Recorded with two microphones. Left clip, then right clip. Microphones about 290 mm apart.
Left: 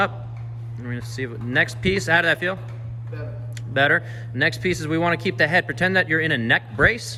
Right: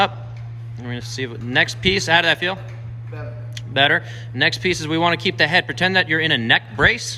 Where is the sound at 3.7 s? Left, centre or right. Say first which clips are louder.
Right 2 dB; centre.